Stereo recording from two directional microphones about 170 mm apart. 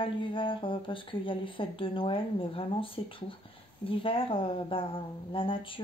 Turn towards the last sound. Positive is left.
turn(degrees=30)  # may be behind; listen again after turning